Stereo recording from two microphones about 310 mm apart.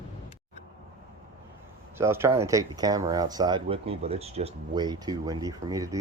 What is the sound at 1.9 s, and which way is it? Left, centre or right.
Speech, centre.